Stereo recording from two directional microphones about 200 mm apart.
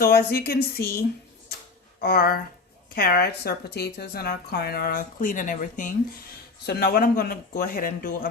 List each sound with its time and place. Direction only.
0.0 s speech: 50° left (ahead or behind)